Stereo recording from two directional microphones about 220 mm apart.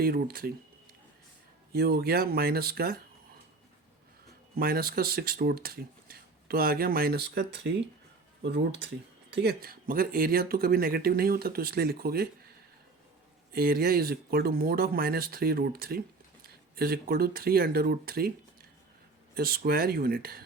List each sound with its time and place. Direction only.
0.0 s speech: 45° right (ahead or behind)
1.7 s speech: 45° right (ahead or behind)
4.5 s speech: 40° right (ahead or behind)
13.5 s speech: 45° right (ahead or behind)
19.3 s speech: 45° right (ahead or behind)